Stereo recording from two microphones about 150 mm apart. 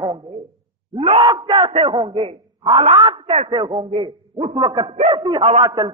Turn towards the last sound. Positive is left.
turn(degrees=-35)  # may be behind; listen again after turning